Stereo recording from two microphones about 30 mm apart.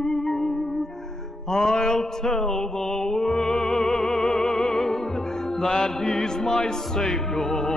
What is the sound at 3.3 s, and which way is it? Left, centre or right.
Opera, left.